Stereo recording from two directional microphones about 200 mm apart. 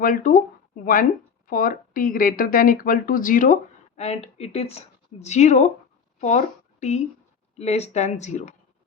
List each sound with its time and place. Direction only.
0.0 s speech: 45° left (ahead or behind)
1.5 s a woman's voice: 45° left (ahead or behind)